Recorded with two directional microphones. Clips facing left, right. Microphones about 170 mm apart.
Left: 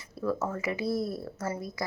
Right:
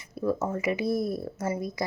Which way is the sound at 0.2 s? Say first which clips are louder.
Right 3 dB; 20° right (ahead or behind).